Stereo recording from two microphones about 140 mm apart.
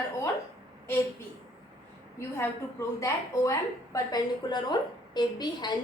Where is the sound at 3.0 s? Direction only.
25° left (ahead or behind).